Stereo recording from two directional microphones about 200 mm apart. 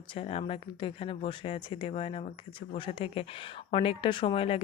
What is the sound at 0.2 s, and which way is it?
Speech, 30° left (ahead or behind).